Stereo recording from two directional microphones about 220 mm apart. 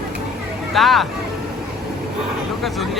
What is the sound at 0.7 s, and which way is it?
Speech, centre (ahead or behind).